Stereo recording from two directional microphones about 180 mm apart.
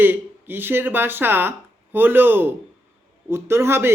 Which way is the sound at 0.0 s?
10° right (ahead or behind).